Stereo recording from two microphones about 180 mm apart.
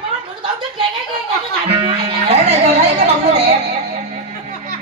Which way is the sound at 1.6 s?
35° right (ahead or behind).